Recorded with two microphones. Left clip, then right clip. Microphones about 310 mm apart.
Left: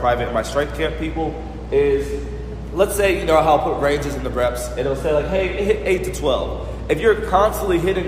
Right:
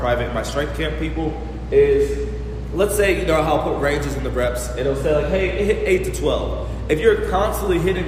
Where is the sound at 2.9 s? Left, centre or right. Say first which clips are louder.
Left 2 dB; centre.